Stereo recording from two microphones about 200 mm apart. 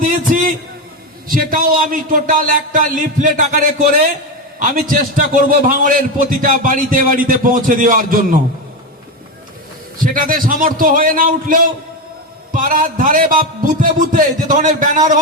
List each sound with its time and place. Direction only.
1.3 s a man's voice: 45° right (ahead or behind)
10.0 s a man's voice: 45° right (ahead or behind)